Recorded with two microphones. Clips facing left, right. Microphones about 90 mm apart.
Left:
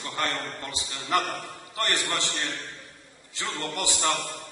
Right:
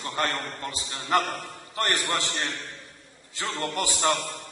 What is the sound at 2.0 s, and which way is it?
Speech, 25° right (ahead or behind).